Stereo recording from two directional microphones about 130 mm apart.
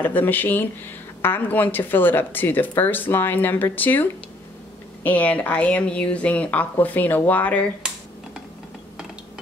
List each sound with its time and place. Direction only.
0.0 s speech: 15° left (ahead or behind)